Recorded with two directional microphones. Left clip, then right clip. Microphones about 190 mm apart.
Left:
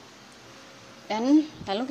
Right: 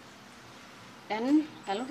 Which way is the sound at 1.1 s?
30° left (ahead or behind).